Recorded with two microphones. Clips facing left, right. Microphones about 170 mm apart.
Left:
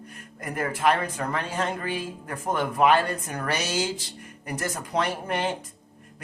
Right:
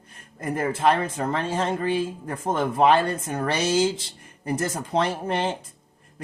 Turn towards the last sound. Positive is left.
turn(degrees=-30)  # may be behind; listen again after turning